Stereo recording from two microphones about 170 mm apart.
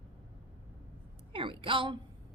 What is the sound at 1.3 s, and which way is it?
Speech, 30° right (ahead or behind).